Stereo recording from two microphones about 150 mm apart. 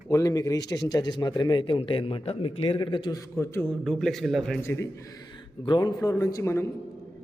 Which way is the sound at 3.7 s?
5° left (ahead or behind).